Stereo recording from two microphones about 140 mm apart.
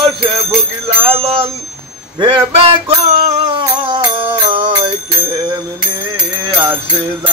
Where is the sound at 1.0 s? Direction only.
40° right (ahead or behind).